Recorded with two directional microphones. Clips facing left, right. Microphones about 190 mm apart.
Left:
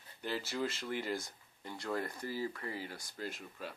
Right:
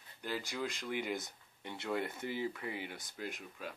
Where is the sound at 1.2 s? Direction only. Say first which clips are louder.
Right 1 dB; 20° right (ahead or behind).